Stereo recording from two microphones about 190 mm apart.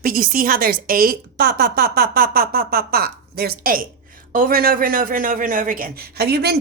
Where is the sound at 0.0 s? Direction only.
50° right (ahead or behind).